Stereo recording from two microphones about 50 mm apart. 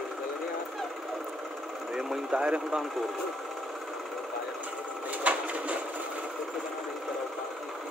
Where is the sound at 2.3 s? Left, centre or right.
Centre.